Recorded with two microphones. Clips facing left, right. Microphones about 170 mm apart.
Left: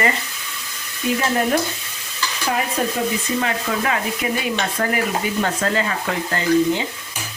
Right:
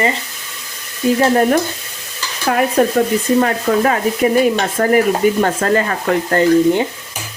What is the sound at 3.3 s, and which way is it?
Stir, 45° right (ahead or behind).